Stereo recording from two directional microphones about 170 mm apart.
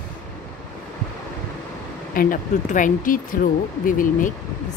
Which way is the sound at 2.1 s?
55° left (ahead or behind).